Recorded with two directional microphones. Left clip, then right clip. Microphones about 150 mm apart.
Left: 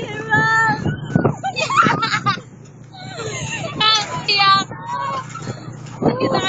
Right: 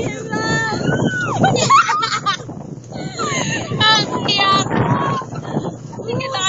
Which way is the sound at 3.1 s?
50° right (ahead or behind).